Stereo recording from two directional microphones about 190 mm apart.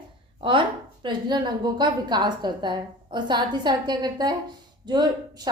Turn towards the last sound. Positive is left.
turn(degrees=-20)  # may be behind; listen again after turning